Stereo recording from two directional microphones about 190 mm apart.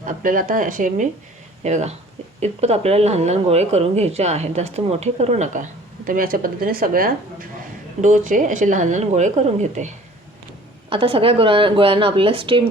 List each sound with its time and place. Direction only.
0.0 s speech: 45° right (ahead or behind)
6.1 s speech: 50° right (ahead or behind)
10.8 s a woman's voice: 30° right (ahead or behind)